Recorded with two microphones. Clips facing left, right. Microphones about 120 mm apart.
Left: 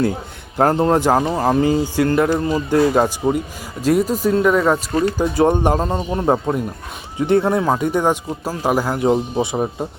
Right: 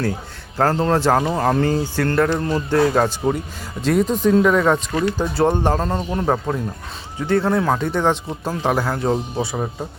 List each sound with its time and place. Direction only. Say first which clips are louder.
0.5 s speech: left 3 dB; 20° left (ahead or behind)
1.2 s speech: left 2 dB; 5° left (ahead or behind)
4.9 s speech: left 2 dB; 35° left (ahead or behind)
5.1 s speech: left 3 dB; 15° left (ahead or behind)